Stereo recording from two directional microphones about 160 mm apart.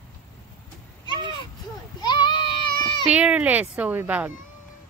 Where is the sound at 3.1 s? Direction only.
10° right (ahead or behind).